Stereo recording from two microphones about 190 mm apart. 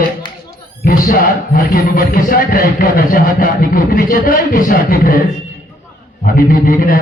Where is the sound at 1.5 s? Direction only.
50° left (ahead or behind).